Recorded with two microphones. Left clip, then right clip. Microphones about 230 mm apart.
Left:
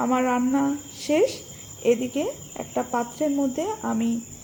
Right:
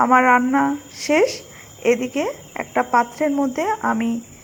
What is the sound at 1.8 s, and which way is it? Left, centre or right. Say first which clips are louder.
Speech: right 3 dB; right.